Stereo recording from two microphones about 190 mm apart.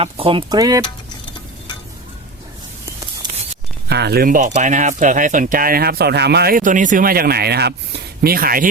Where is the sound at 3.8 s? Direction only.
60° right (ahead or behind).